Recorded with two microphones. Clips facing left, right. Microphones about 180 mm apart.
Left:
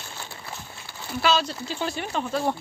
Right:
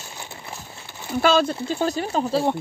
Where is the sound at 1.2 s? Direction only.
50° right (ahead or behind); by 2.4 s 35° right (ahead or behind).